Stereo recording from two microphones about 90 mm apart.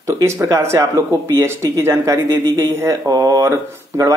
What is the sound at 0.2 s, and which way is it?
Speech, 35° right (ahead or behind).